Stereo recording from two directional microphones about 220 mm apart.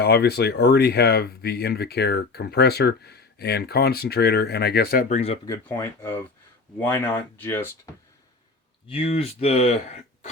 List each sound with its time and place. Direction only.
0.0 s speech: 45° left (ahead or behind); by 5.4 s 30° left (ahead or behind)
5.5 s speech: 10° left (ahead or behind)
8.9 s speech: 25° left (ahead or behind)